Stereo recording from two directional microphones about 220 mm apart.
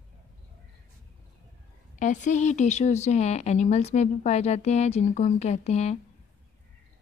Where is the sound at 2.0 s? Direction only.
35° left (ahead or behind).